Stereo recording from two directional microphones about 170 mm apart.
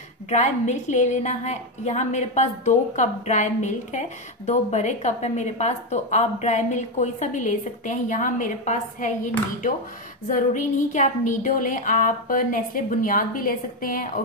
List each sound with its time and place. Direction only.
0.3 s a woman's voice: 45° left (ahead or behind)